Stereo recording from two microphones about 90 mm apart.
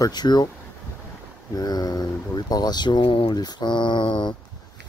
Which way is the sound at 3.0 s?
90° left.